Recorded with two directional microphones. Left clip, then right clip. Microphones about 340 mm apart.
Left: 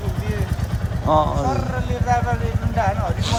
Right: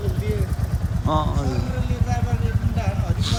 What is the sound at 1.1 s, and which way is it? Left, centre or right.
Speech, centre.